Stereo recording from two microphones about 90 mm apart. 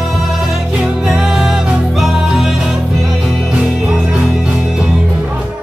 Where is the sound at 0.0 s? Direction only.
Centre (ahead or behind).